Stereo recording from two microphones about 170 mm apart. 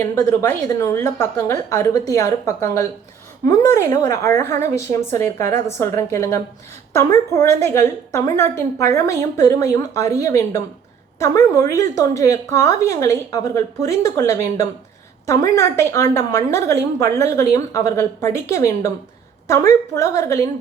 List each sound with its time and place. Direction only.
0.0 s a woman's voice: 15° left (ahead or behind)